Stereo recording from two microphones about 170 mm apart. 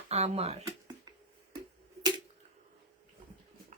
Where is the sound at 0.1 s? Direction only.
40° right (ahead or behind).